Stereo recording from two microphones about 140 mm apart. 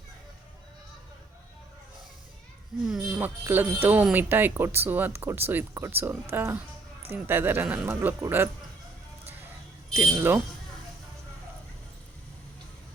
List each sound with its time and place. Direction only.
2.8 s speech: 5° right (ahead or behind)
9.9 s a man's voice: 20° right (ahead or behind)